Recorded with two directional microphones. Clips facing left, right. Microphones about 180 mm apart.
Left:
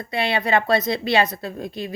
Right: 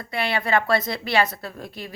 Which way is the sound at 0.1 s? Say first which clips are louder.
Left 2 dB; 20° left (ahead or behind).